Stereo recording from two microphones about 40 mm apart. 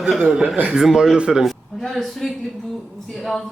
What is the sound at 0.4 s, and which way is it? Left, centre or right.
Speech, right.